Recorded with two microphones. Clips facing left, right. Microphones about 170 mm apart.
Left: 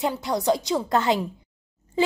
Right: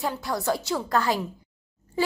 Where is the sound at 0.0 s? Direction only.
20° left (ahead or behind).